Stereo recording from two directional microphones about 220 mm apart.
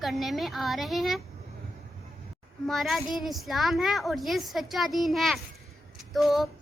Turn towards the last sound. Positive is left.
turn(degrees=0)  # may be behind; listen again after turning